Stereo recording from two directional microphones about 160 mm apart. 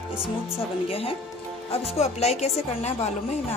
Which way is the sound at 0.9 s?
35° left (ahead or behind).